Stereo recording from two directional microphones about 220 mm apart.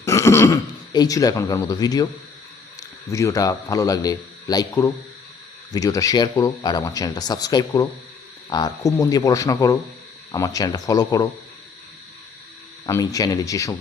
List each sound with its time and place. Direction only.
0.0 s a man's voice: 15° left (ahead or behind)
12.8 s speech: 15° left (ahead or behind)